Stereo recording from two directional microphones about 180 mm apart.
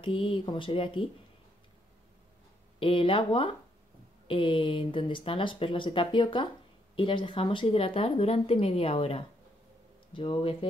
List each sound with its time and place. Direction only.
0.0 s speech: 30° left (ahead or behind)
2.8 s a woman's voice: 30° left (ahead or behind)